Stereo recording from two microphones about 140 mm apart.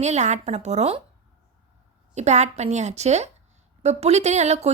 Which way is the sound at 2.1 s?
55° right (ahead or behind).